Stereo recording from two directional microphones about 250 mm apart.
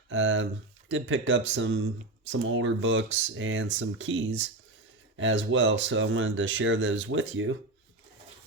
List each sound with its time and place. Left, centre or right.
0.1 s speech: right